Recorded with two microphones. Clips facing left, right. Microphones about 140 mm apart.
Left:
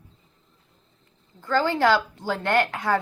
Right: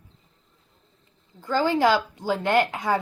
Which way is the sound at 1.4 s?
10° right (ahead or behind).